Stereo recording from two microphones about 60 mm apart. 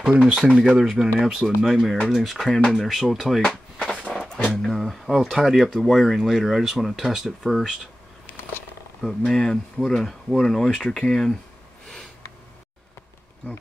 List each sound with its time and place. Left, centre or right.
0.0 s speech: centre
3.9 s music: centre
4.6 s speech: centre
9.0 s speech: centre